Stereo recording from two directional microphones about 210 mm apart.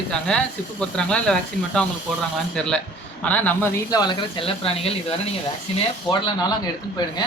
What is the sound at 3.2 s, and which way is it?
A man's voice, 10° left (ahead or behind).